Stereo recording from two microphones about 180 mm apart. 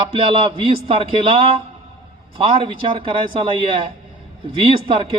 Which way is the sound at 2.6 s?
30° right (ahead or behind).